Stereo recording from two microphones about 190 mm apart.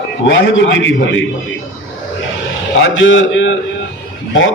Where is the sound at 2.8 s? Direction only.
85° left.